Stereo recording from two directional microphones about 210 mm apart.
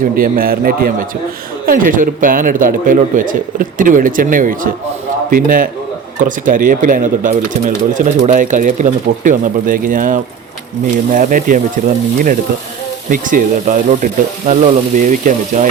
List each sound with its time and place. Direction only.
0.0 s a man's voice: 45° right (ahead or behind)
13.1 s speech: 40° right (ahead or behind)